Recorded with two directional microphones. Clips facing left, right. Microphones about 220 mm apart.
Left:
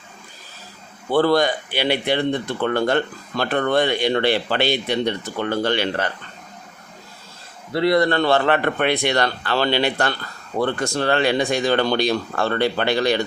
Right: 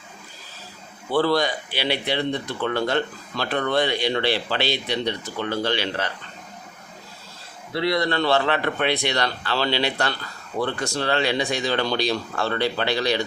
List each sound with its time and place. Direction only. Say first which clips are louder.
1.1 s speech: left 4 dB; 50° left (ahead or behind)
7.7 s speech: left 5 dB; 50° left (ahead or behind)